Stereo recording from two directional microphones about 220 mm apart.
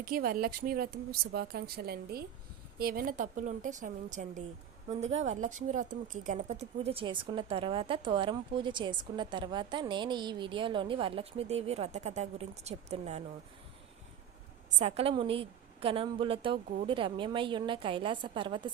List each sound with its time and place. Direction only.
0.0 s a woman's voice: 40° right (ahead or behind)
14.8 s speech: 30° right (ahead or behind)